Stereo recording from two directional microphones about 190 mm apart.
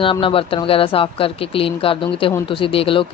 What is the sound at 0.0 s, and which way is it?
Speech, 25° left (ahead or behind).